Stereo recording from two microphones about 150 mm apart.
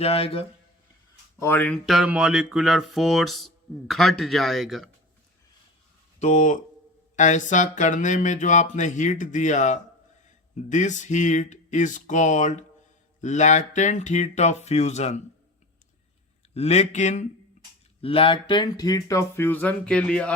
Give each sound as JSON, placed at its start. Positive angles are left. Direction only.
{"t": 0.0, "sound": "speech", "side_deg": 40}
{"t": 1.4, "sound": "speech", "side_deg": 15}
{"t": 1.9, "sound": "speech", "side_deg": -5}
{"t": 6.1, "sound": "speech", "side_deg": 50}
{"t": 16.6, "sound": "speech", "side_deg": 50}
{"t": 18.0, "sound": "speech", "side_deg": 40}